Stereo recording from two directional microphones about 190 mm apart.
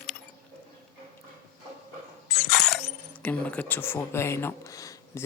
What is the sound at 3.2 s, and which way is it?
Speech, 5° left (ahead or behind).